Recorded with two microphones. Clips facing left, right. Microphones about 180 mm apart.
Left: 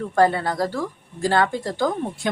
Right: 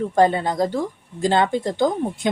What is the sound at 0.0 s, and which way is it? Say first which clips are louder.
Speech: right 2 dB; 20° right (ahead or behind).